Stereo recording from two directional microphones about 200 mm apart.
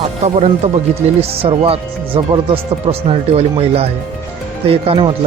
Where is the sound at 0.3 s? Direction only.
35° right (ahead or behind).